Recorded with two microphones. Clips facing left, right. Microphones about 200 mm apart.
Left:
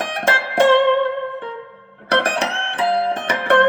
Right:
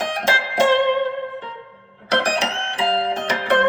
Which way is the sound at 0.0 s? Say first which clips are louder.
Left 1 dB; 55° left (ahead or behind).